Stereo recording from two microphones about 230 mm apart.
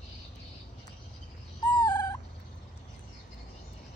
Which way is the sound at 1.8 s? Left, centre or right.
Centre.